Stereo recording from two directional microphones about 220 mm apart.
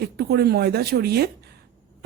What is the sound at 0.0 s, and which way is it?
A woman's voice, 45° right (ahead or behind).